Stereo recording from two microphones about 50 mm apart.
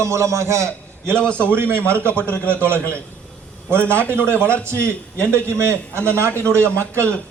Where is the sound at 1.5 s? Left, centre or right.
Right.